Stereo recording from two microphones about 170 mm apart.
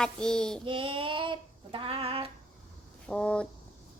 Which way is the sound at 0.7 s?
30° right (ahead or behind).